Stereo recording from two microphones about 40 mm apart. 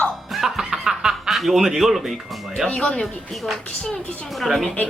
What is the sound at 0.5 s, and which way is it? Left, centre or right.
Music, centre.